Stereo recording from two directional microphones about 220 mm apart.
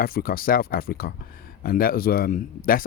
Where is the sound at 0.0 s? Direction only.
40° left (ahead or behind).